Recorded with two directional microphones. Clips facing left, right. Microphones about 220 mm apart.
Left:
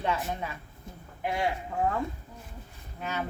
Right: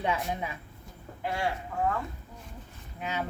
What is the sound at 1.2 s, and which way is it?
Speech, 15° left (ahead or behind).